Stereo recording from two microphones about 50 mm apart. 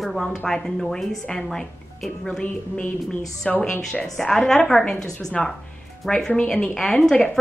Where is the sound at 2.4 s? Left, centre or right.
Left.